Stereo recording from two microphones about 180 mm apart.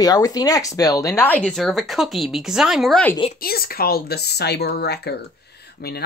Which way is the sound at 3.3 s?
55° left (ahead or behind).